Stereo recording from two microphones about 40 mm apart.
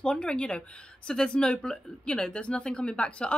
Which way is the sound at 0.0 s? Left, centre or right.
Left.